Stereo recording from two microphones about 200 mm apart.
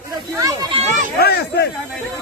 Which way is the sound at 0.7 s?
35° right (ahead or behind).